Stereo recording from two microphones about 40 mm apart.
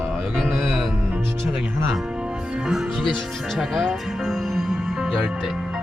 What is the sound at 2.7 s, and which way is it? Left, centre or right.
Speech, centre.